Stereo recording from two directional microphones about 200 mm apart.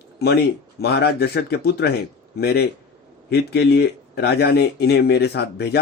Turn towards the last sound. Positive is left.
turn(degrees=55)  # may be behind; listen again after turning